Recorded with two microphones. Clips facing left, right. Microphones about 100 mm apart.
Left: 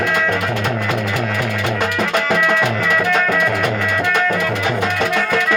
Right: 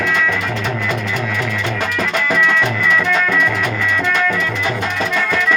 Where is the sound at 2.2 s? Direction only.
50° left (ahead or behind).